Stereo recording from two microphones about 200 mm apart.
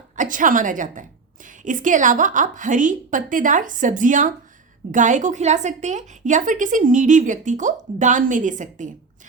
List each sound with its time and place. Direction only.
0.2 s a woman's voice: 40° right (ahead or behind)